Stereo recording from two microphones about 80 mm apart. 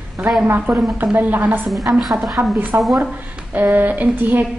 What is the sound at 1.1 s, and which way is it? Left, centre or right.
Speech, right.